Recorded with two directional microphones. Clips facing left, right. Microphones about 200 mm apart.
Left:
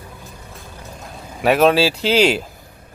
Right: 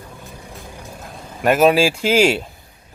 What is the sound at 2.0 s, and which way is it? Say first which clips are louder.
Speech: even; 45° right (ahead or behind).